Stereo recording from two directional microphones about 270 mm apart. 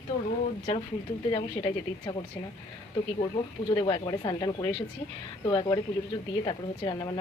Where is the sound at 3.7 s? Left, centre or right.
Centre.